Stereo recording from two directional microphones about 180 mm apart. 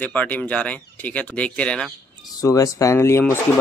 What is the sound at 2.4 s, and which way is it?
Speech, 20° left (ahead or behind).